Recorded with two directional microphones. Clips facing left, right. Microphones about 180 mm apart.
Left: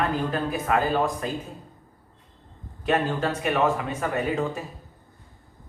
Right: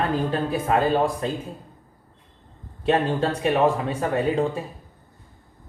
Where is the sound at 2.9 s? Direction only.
30° right (ahead or behind).